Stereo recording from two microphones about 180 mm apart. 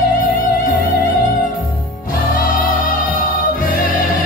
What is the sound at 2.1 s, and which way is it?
Music, 50° left (ahead or behind).